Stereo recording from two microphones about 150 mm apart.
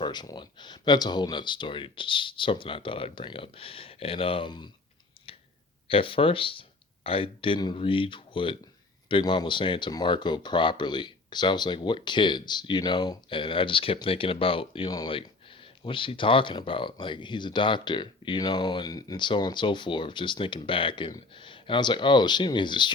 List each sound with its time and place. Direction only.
0.0 s speech: 30° left (ahead or behind)
5.3 s clicking: 35° left (ahead or behind)
5.9 s speech: 35° left (ahead or behind)